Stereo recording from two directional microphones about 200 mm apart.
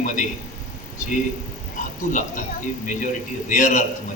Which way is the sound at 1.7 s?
40° left (ahead or behind).